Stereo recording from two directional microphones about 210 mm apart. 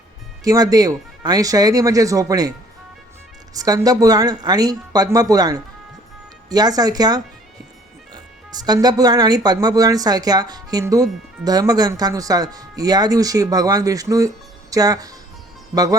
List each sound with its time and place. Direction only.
0.4 s speech: 15° right (ahead or behind)
3.5 s speech: 15° right (ahead or behind)